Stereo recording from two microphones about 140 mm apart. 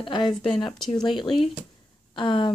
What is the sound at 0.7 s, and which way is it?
Speech, 5° left (ahead or behind).